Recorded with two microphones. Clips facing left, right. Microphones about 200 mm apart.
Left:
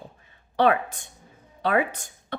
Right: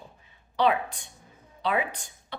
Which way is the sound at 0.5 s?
50° left (ahead or behind).